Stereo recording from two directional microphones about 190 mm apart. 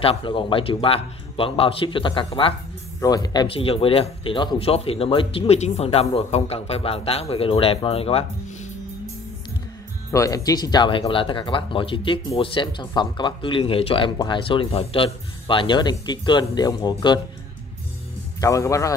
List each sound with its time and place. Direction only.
0.0 s speech: 30° left (ahead or behind)
10.1 s speech: 20° left (ahead or behind)
18.4 s speech: 15° left (ahead or behind)